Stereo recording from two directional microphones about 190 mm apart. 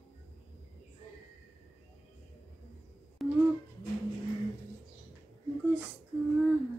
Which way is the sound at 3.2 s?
Centre (ahead or behind).